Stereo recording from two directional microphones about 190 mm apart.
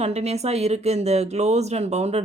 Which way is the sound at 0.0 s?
35° right (ahead or behind).